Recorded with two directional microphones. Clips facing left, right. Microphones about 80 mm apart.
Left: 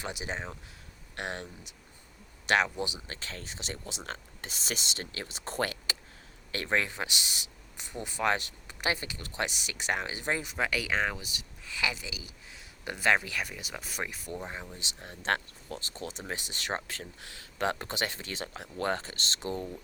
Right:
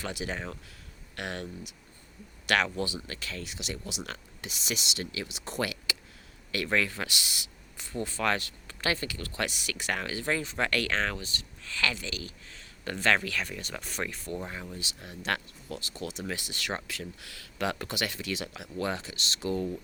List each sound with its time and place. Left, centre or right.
0.0 s speech: left
10.5 s speech: centre
14.8 s speech: left